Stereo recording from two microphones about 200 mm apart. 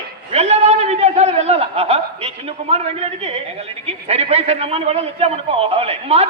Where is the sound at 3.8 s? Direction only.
30° right (ahead or behind).